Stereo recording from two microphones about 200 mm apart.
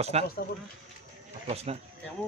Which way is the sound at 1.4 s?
30° right (ahead or behind).